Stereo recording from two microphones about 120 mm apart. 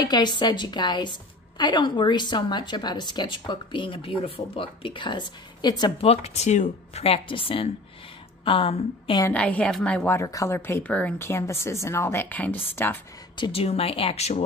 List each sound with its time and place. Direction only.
0.0 s a woman's voice: 35° left (ahead or behind)
5.9 s speech: 60° left (ahead or behind)
9.3 s a woman's voice: 10° left (ahead or behind)
10.1 s a woman's voice: 25° left (ahead or behind)
11.2 s a woman's voice: 25° left (ahead or behind)
13.4 s speech: 55° left (ahead or behind)